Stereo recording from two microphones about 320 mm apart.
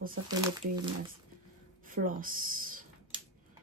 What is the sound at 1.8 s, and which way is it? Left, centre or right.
Speech, right.